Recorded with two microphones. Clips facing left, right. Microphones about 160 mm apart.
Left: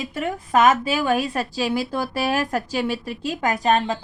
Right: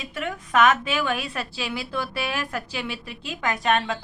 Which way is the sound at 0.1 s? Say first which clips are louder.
Left 3 dB; 40° left (ahead or behind).